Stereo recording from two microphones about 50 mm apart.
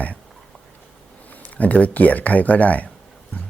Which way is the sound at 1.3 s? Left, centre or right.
Left.